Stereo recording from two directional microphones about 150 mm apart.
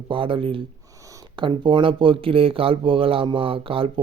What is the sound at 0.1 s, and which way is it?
Speech, 35° right (ahead or behind).